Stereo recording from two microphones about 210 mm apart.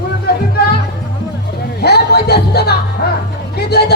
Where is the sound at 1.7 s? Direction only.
50° left (ahead or behind).